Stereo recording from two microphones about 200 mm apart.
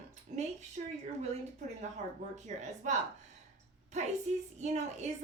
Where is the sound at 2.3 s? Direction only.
35° right (ahead or behind).